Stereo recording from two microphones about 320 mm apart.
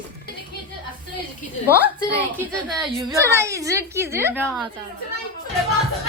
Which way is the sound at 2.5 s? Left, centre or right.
Centre.